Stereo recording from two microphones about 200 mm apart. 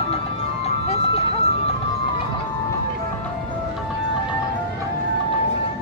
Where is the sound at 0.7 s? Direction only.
30° left (ahead or behind).